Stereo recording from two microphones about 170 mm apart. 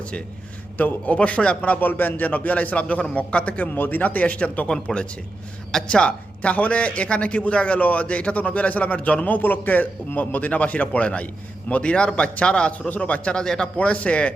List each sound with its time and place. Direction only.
0.0 s a man's voice: 5° left (ahead or behind)